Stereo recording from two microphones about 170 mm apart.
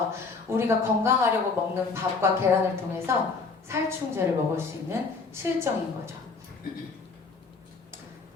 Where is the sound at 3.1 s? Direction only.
15° right (ahead or behind).